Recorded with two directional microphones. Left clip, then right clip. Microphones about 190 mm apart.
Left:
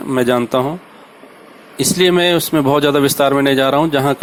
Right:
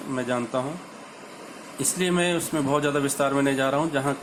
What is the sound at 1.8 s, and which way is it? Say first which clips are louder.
Speech: left 12 dB; 50° left (ahead or behind).